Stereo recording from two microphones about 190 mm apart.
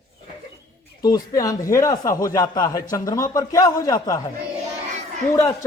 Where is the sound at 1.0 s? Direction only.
20° left (ahead or behind).